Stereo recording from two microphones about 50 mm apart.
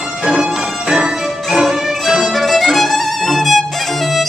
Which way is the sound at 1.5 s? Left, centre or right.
Centre.